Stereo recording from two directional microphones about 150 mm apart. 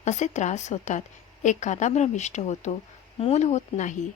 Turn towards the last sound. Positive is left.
turn(degrees=50)  # may be behind; listen again after turning